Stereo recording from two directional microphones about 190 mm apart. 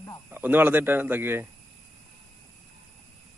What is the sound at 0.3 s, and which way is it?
Speech, 10° right (ahead or behind).